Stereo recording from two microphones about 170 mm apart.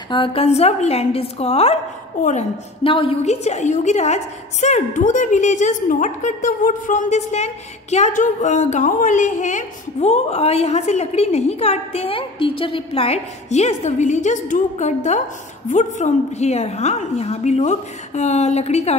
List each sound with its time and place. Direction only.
0.1 s a woman's voice: 30° left (ahead or behind)
2.8 s a woman's voice: 30° left (ahead or behind)